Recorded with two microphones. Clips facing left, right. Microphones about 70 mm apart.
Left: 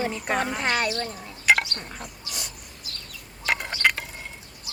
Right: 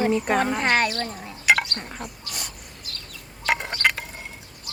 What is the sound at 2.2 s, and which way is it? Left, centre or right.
Dog, right.